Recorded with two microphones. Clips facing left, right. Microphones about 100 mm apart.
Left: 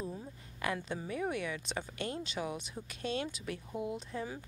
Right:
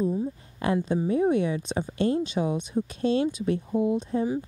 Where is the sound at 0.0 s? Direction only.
20° right (ahead or behind).